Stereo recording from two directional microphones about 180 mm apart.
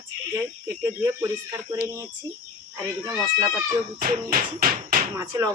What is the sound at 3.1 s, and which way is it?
Speech, 20° right (ahead or behind).